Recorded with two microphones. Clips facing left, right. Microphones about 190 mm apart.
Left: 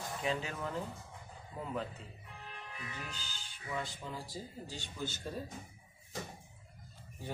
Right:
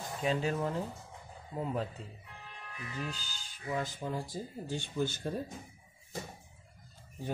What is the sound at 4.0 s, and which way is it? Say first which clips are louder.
Speech: right 6 dB; 55° right (ahead or behind).